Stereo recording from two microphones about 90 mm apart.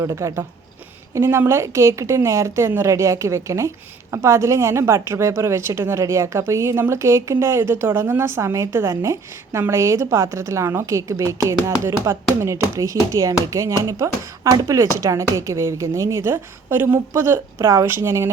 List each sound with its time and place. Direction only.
0.0 s a woman's voice: 35° right (ahead or behind)
14.5 s speech: 45° right (ahead or behind)
14.9 s a woman's voice: 35° right (ahead or behind)